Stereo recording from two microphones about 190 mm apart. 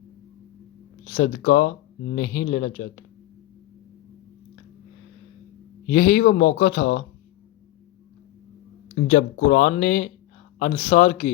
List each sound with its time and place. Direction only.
1.1 s speech: 55° left (ahead or behind)
5.9 s speech: 45° left (ahead or behind)
9.0 s speech: 60° left (ahead or behind); by 11.3 s 40° left (ahead or behind)